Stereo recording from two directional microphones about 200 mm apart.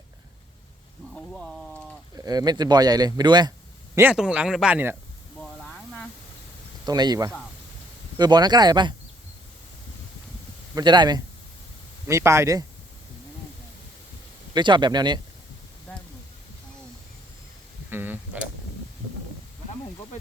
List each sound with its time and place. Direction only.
1.1 s a sound: centre (ahead or behind)
2.1 s speech: 20° right (ahead or behind)
3.9 s speech: 5° right (ahead or behind)
5.4 s a sound: 5° left (ahead or behind)
6.8 s speech: 20° right (ahead or behind)
10.8 s speech: 20° right (ahead or behind)
14.5 s speech: 25° right (ahead or behind)
17.9 s speech: 10° right (ahead or behind)